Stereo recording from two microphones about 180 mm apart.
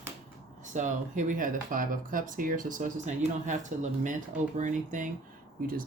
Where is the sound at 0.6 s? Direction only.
45° right (ahead or behind).